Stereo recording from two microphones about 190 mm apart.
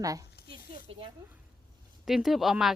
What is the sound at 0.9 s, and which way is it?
Speech, 30° right (ahead or behind).